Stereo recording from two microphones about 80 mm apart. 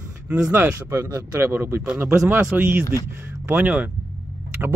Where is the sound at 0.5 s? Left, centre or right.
Right.